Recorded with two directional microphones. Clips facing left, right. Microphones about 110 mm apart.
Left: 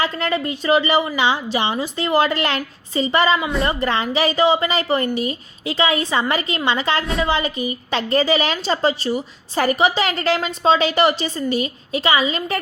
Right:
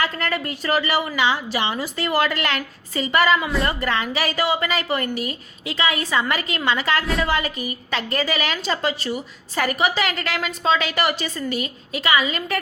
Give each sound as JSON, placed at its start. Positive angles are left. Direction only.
{"t": 0.0, "sound": "a woman's voice", "side_deg": 20}